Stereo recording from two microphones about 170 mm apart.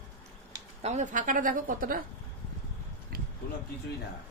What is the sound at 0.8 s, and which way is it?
Speech, 45° right (ahead or behind).